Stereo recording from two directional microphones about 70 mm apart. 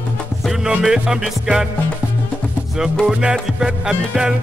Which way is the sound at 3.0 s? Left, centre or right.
Centre.